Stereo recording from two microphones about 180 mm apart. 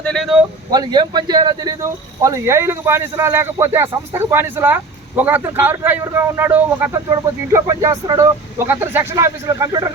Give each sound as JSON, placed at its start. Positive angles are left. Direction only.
{"t": 0.0, "sound": "speech", "side_deg": 0}
{"t": 0.7, "sound": "speech", "side_deg": -25}